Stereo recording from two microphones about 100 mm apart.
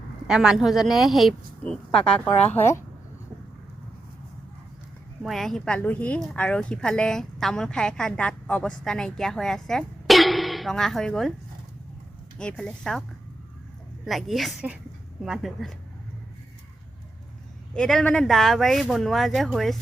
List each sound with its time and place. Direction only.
0.3 s a woman's voice: 5° right (ahead or behind)
2.5 s speech: 25° left (ahead or behind)
5.2 s a woman's voice: centre (ahead or behind)
12.4 s a woman's voice: 10° left (ahead or behind)
17.7 s a woman's voice: 5° left (ahead or behind)